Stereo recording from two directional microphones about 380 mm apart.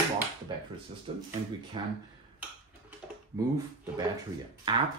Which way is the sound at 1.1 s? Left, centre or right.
Centre.